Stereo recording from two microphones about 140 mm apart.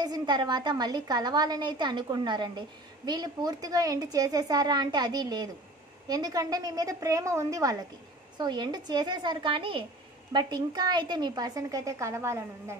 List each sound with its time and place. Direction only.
0.0 s a woman's voice: 30° right (ahead or behind)